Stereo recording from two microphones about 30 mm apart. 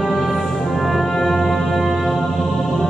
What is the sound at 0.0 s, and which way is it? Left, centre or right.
Music, centre.